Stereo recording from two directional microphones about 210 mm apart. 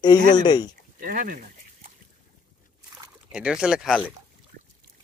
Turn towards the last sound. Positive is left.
turn(degrees=-5)  # may be behind; listen again after turning